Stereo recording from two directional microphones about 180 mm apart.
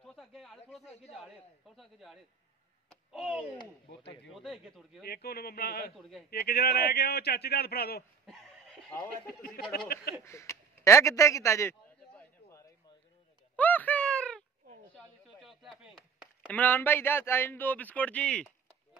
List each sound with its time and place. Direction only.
0.0 s a sound: centre (ahead or behind)
1.8 s speech: centre (ahead or behind)
2.9 s a sound: centre (ahead or behind)
4.4 s speech: centre (ahead or behind)
5.0 s a man's voice: 60° left (ahead or behind)
5.9 s speech: centre (ahead or behind)
6.3 s a man's voice: 60° left (ahead or behind)
8.9 s speech: 10° left (ahead or behind)
9.9 s a man's voice: 60° left (ahead or behind)
10.2 s a man's voice: 15° left (ahead or behind)
12.2 s a sound: 15° left (ahead or behind)
15.0 s chop: centre (ahead or behind)
16.4 s speech: 10° left (ahead or behind)